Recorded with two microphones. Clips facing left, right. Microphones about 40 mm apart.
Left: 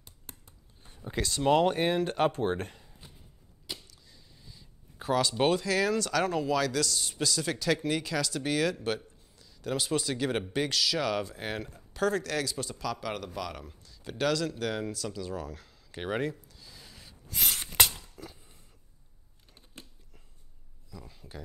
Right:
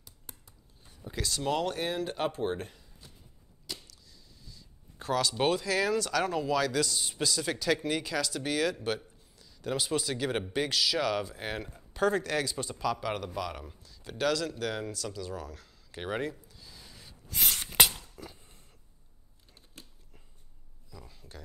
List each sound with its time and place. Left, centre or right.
0.0 s a sound: left; by 2.0 s centre
2.0 s speech: left
3.6 s arrow: centre
4.9 s speech: centre
19.5 s biting: left
20.9 s a sound: centre